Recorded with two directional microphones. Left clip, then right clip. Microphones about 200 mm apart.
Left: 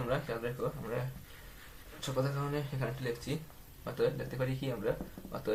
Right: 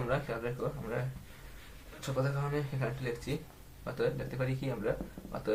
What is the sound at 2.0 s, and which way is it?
Speech, 25° left (ahead or behind).